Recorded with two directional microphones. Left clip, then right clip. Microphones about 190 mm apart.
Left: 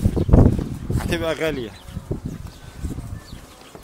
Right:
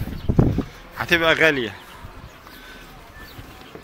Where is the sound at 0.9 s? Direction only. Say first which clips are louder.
Right 7 dB; 15° left (ahead or behind).